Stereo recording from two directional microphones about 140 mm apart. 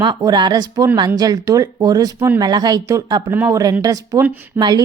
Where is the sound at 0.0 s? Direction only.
30° right (ahead or behind).